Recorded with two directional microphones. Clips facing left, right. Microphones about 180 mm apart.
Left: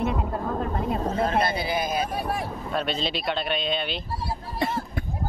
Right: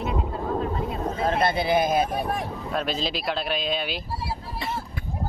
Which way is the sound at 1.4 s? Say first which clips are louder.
Right 4 dB; 50° right (ahead or behind).